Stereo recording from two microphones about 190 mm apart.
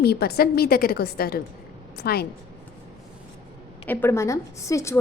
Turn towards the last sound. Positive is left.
turn(degrees=15)  # may be behind; listen again after turning